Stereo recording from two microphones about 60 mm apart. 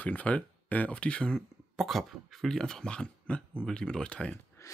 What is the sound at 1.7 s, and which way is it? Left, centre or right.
Speech, centre.